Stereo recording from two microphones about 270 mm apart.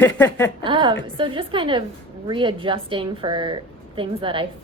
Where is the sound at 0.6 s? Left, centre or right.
Centre.